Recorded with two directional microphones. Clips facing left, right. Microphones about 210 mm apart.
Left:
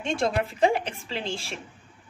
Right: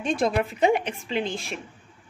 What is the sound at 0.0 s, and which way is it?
A woman's voice, 30° left (ahead or behind).